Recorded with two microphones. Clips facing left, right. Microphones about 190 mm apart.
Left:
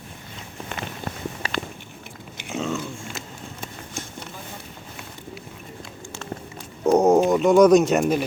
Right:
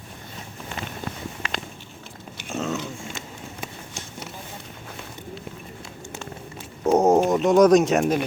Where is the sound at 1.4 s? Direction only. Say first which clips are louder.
Left 4 dB; 35° left (ahead or behind).